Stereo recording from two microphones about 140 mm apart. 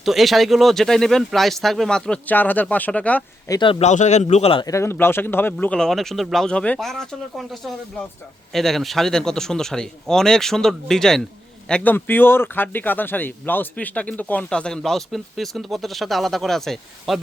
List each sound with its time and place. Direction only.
0.0 s speech: centre (ahead or behind)
3.5 s speech: 35° left (ahead or behind)
3.8 s a man's voice: 55° left (ahead or behind)
4.6 s speech: 20° left (ahead or behind); by 17.2 s centre (ahead or behind)